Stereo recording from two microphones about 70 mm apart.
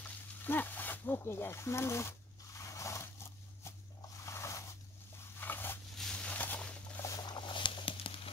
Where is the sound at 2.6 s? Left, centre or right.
Left.